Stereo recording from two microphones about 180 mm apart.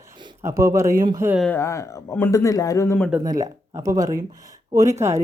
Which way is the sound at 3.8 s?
20° right (ahead or behind).